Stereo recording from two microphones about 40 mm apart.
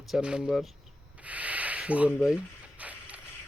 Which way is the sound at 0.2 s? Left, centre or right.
Right.